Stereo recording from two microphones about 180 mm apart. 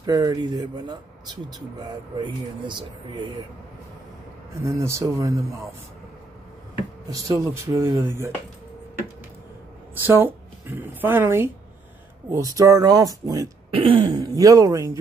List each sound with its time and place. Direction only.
0.0 s speech: 20° right (ahead or behind)
4.6 s speech: 15° right (ahead or behind)
7.1 s speech: 20° right (ahead or behind)
10.0 s speech: 10° right (ahead or behind)
13.7 s speech: 30° right (ahead or behind)